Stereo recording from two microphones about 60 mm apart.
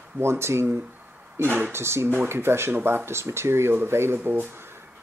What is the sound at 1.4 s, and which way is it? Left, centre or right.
Speech, right.